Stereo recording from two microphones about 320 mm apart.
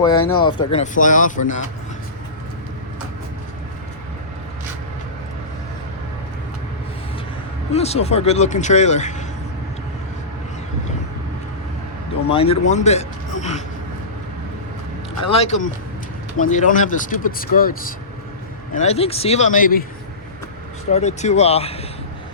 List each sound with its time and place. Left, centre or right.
0.0 s speech: centre
7.7 s speech: centre
12.3 s speech: centre
15.3 s speech: centre
20.9 s speech: left